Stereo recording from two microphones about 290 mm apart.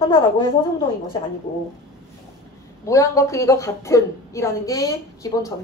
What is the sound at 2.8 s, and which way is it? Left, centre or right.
A woman's voice, centre.